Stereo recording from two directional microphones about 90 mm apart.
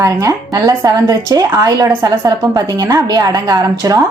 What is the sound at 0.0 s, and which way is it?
Speech, 40° right (ahead or behind).